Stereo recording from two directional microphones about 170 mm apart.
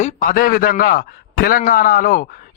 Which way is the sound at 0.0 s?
55° left (ahead or behind).